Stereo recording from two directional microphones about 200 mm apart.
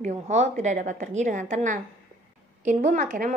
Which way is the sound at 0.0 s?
35° right (ahead or behind).